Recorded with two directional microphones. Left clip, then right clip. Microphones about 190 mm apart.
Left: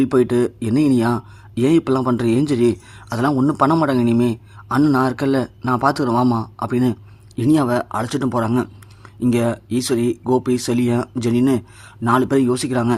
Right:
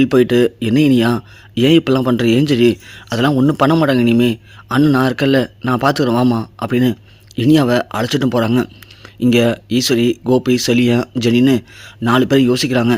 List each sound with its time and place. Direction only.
0.0 s speech: 35° right (ahead or behind)
10.7 s speech: 65° right (ahead or behind)
12.0 s speech: 40° right (ahead or behind)